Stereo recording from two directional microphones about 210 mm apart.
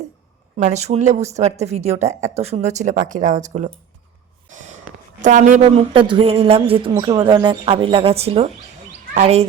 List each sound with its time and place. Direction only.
0.5 s speech: 35° right (ahead or behind)
4.4 s snort: 35° right (ahead or behind)
5.2 s speech: 35° right (ahead or behind)